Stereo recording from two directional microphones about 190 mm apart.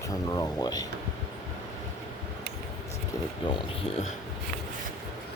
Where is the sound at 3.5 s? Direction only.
30° left (ahead or behind).